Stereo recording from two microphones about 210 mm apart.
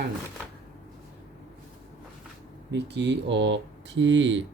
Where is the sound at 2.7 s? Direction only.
55° right (ahead or behind).